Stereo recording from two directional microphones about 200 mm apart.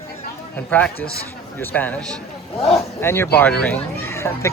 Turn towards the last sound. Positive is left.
turn(degrees=15)  # may be behind; listen again after turning